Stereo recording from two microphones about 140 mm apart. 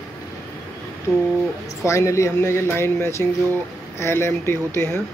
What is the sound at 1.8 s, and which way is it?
Speech, 20° left (ahead or behind).